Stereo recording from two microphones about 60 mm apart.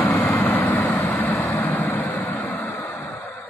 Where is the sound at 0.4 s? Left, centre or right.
Left.